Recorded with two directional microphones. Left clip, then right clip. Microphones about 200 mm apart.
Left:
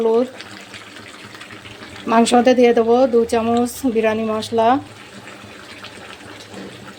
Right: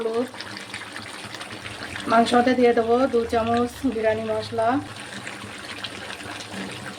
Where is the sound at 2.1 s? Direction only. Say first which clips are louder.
Left 5 dB; 35° left (ahead or behind).